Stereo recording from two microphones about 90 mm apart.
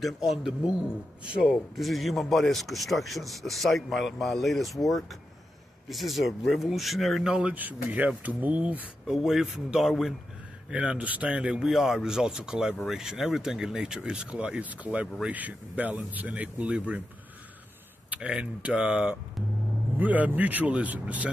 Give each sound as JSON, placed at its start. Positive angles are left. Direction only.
{"t": 0.0, "sound": "speech", "side_deg": -5}
{"t": 7.3, "sound": "speech", "side_deg": -15}
{"t": 10.7, "sound": "speech", "side_deg": -10}
{"t": 18.1, "sound": "speech", "side_deg": -15}